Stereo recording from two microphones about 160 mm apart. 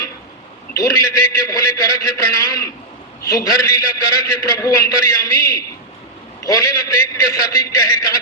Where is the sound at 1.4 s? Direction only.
20° left (ahead or behind).